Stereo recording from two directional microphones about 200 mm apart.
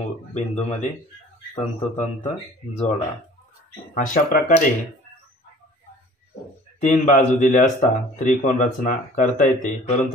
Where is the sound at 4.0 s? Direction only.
45° left (ahead or behind).